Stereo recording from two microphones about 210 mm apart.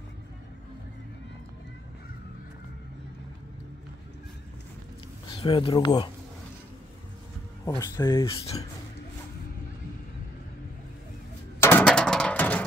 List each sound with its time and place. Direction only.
5.4 s speech: 25° left (ahead or behind)
7.6 s speech: 15° left (ahead or behind)
11.6 s a sound: 5° left (ahead or behind)